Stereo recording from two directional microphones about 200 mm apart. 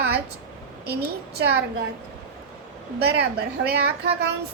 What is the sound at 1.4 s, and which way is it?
Speech, 55° right (ahead or behind).